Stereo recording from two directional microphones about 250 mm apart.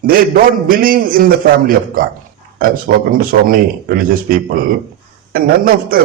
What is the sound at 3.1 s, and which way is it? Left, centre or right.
A man's voice, right.